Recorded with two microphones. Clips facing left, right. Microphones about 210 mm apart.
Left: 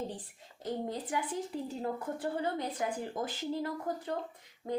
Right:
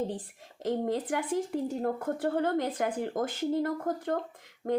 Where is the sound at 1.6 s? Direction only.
50° right (ahead or behind).